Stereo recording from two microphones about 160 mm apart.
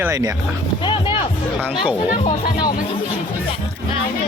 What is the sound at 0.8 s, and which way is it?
Music, 30° left (ahead or behind).